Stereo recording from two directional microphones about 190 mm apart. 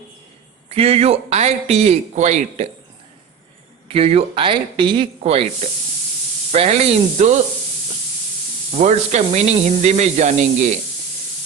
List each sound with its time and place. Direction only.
0.7 s a man's voice: 30° right (ahead or behind)
3.8 s a man's voice: 30° right (ahead or behind)
8.7 s a man's voice: 35° right (ahead or behind)